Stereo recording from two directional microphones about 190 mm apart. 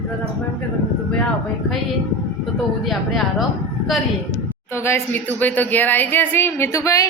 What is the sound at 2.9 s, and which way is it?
Speech, centre (ahead or behind).